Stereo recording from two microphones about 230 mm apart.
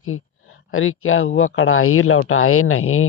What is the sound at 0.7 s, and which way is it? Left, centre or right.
Speech, left.